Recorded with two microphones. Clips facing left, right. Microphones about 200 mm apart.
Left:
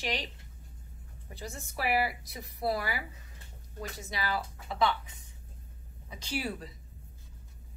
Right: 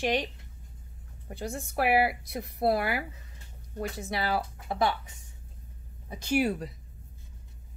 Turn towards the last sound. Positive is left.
turn(degrees=-50)  # may be behind; listen again after turning